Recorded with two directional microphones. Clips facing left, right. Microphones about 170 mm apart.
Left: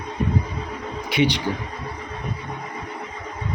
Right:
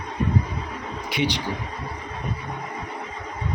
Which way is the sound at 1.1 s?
60° left (ahead or behind).